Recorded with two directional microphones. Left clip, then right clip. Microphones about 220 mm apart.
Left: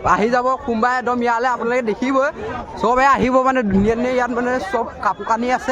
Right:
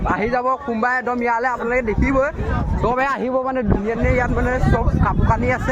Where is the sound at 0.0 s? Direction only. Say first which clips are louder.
Left 5 dB; 35° left (ahead or behind).